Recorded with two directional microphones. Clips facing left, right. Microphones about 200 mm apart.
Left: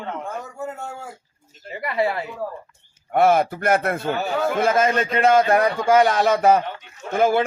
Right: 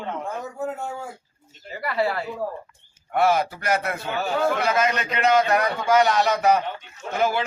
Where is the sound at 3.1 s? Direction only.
50° left (ahead or behind).